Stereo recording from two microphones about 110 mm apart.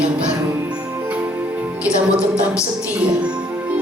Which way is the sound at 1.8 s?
10° right (ahead or behind).